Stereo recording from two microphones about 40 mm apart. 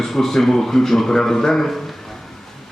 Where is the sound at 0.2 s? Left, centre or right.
Centre.